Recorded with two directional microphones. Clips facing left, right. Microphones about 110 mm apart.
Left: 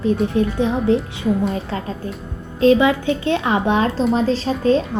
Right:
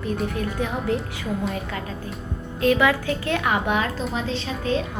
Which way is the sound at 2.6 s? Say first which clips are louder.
Left 6 dB; 25° left (ahead or behind).